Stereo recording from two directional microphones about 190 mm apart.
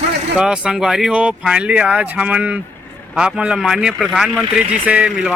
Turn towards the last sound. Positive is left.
turn(degrees=-5)  # may be behind; listen again after turning